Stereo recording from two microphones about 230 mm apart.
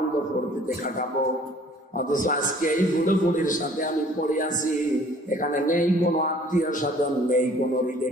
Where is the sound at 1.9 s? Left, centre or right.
Left.